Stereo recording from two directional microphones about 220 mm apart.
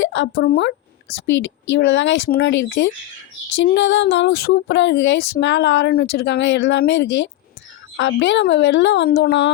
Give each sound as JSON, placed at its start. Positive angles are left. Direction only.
{"t": 0.0, "sound": "speech", "side_deg": 55}